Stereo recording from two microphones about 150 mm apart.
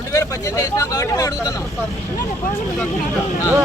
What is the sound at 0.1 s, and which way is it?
Speech, 20° left (ahead or behind).